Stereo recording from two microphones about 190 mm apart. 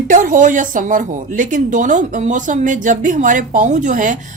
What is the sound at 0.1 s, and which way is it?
A woman's voice, 45° right (ahead or behind).